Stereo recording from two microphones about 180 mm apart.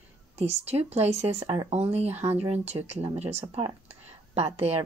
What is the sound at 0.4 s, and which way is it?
Speech, 35° right (ahead or behind).